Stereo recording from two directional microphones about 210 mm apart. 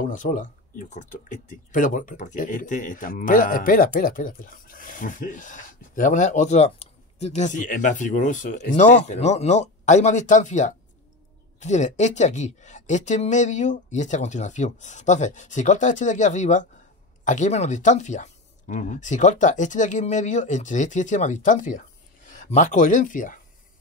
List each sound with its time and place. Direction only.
0.0 s speech: 40° left (ahead or behind)